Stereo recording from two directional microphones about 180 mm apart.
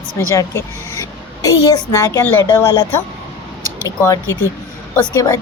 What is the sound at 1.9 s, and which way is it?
Speech, 15° left (ahead or behind).